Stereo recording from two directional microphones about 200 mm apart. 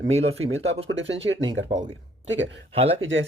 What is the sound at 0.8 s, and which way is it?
Speech, 65° right (ahead or behind).